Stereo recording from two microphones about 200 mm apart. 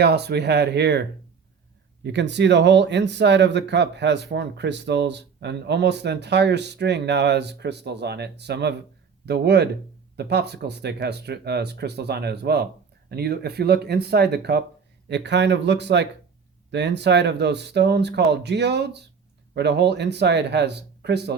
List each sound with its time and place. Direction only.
0.0 s speech: 55° right (ahead or behind)
2.0 s speech: 60° right (ahead or behind)